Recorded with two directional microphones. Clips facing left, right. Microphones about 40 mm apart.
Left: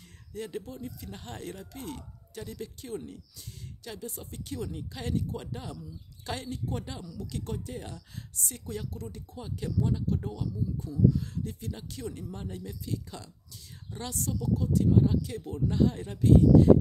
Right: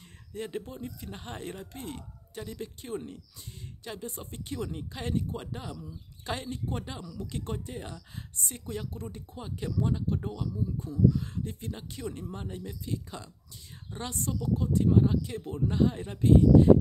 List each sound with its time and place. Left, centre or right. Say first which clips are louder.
0.3 s speech: right 1 dB; right